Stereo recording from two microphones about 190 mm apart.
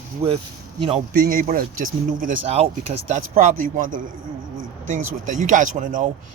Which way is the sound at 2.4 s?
30° right (ahead or behind).